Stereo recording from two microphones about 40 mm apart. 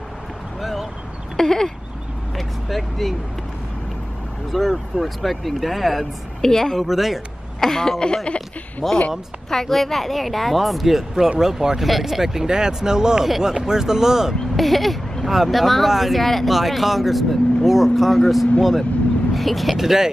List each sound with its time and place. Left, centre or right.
0.6 s a sound: centre
1.3 s a sound: centre
2.3 s vehicle: centre
4.5 s a woman's voice: centre
6.9 s speech: centre
7.6 s a woman's voice: centre
8.8 s a woman's voice: centre
14.6 s speech: centre